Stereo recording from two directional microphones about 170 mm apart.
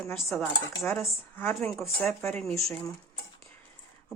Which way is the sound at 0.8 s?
15° left (ahead or behind).